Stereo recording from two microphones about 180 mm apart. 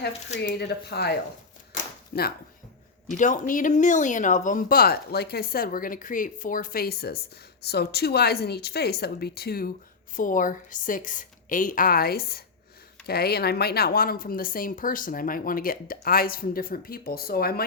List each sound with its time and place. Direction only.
0.4 s speech: 65° left (ahead or behind)
2.1 s speech: 60° left (ahead or behind)
3.1 s a woman's voice: 45° left (ahead or behind)